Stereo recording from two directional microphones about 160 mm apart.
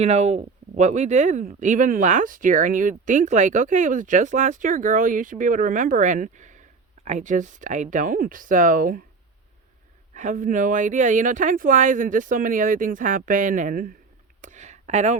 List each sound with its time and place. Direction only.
0.0 s speech: 45° right (ahead or behind)
10.2 s speech: 55° right (ahead or behind)
14.4 s a sound: 45° right (ahead or behind)